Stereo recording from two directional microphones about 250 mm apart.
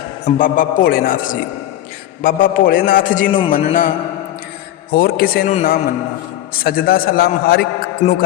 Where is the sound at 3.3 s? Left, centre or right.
Centre.